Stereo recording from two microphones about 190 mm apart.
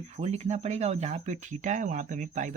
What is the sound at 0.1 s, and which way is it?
Speech, 35° right (ahead or behind).